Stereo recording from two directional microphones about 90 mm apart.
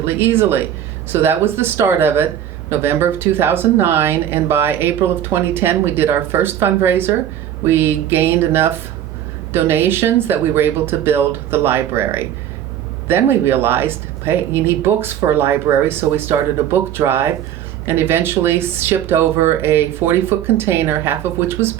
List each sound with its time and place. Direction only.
0.0 s speech: 25° right (ahead or behind)